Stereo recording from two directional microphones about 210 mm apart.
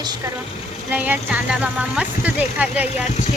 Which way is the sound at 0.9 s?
10° right (ahead or behind).